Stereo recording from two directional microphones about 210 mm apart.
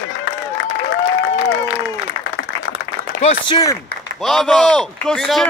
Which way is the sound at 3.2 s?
20° left (ahead or behind).